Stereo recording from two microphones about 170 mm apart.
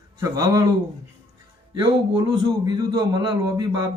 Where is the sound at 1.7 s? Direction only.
25° right (ahead or behind).